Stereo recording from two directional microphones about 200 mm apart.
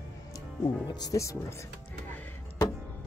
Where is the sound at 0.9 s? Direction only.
20° left (ahead or behind).